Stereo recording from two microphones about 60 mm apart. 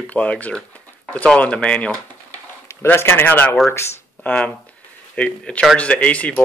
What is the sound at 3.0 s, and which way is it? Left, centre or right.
Speech, left.